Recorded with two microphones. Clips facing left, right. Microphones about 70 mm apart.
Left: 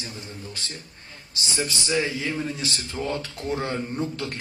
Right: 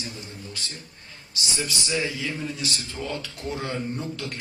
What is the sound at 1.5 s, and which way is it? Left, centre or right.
Speech, left.